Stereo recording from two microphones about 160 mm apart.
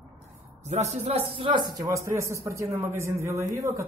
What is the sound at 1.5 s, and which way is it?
A man's voice, 25° right (ahead or behind).